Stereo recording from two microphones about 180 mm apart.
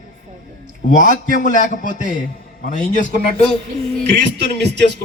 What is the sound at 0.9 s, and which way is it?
A man's voice, 45° left (ahead or behind).